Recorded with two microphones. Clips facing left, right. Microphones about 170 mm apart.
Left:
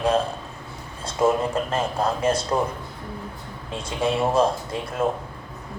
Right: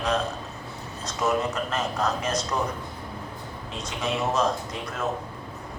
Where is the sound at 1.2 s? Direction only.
30° left (ahead or behind).